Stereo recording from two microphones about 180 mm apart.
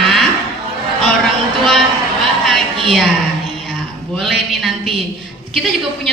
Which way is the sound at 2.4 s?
Centre (ahead or behind).